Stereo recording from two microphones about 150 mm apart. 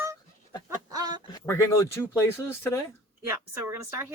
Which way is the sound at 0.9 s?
25° right (ahead or behind).